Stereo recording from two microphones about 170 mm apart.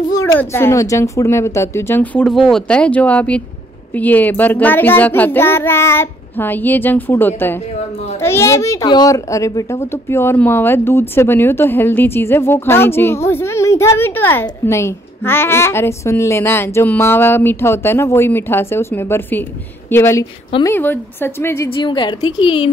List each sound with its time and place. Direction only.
0.1 s a child's voice: 20° left (ahead or behind)
21.6 s a woman's voice: 30° left (ahead or behind)